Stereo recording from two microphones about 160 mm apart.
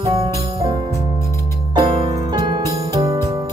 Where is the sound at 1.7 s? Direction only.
35° right (ahead or behind).